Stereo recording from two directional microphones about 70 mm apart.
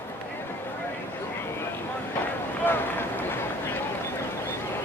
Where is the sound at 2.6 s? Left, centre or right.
Left.